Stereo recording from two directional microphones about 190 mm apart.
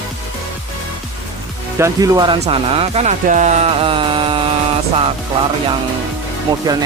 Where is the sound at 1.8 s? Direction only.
20° right (ahead or behind).